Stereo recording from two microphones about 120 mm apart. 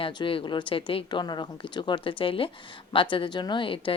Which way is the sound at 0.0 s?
45° left (ahead or behind).